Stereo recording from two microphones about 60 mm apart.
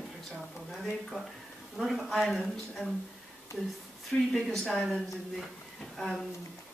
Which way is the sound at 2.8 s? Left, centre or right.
Centre.